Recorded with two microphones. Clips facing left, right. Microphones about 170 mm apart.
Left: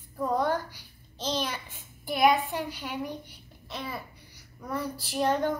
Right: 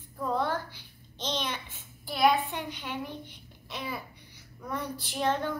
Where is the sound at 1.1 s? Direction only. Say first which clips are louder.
Left 2 dB; 5° left (ahead or behind).